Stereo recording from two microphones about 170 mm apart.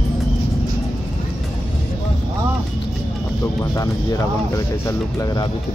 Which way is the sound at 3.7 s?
20° left (ahead or behind).